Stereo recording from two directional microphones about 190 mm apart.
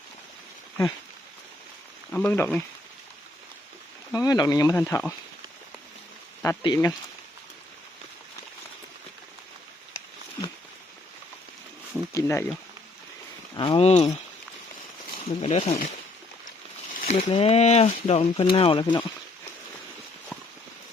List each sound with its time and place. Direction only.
2.1 s speech: 10° left (ahead or behind)
4.1 s speech: 20° left (ahead or behind)
6.4 s speech: 20° left (ahead or behind)
12.1 s speech: 15° left (ahead or behind)
13.6 s speech: 30° left (ahead or behind)
17.1 s speech: 40° left (ahead or behind)